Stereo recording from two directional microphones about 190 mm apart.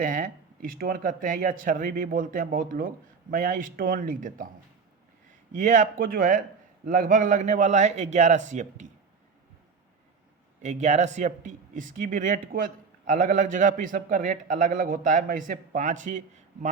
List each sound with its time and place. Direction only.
0.0 s speech: 45° right (ahead or behind)
5.5 s speech: 40° right (ahead or behind)
10.6 s speech: 40° right (ahead or behind)